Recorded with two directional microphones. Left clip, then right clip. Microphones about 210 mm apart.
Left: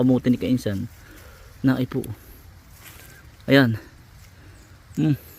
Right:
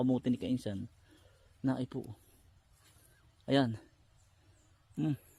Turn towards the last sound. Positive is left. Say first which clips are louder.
# left 13 dB
turn(degrees=0)  # may be behind; listen again after turning